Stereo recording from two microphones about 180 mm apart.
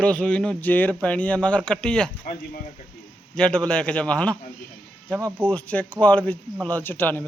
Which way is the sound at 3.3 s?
5° left (ahead or behind).